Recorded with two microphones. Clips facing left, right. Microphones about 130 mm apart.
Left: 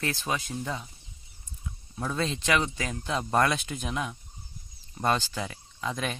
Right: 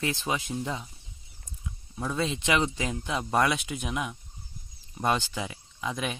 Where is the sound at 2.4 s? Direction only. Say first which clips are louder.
Right 1 dB; 20° right (ahead or behind).